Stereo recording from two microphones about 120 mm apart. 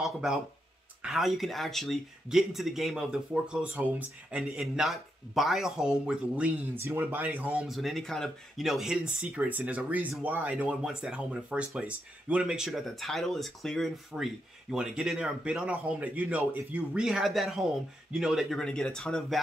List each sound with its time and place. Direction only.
0.0 s speech: centre (ahead or behind)
7.6 s speech: centre (ahead or behind)